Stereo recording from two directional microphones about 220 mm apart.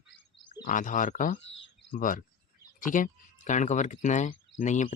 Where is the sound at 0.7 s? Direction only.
35° left (ahead or behind).